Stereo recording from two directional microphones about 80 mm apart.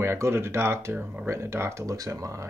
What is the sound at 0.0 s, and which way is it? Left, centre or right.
Speech, right.